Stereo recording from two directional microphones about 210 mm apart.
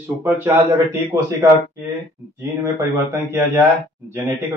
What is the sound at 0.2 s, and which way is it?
Speech, 10° right (ahead or behind).